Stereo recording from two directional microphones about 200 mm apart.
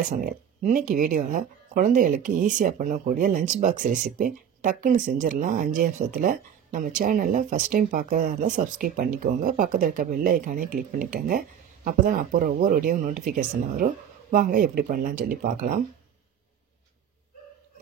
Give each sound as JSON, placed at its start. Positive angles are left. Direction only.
{"t": 0.1, "sound": "speech", "side_deg": -45}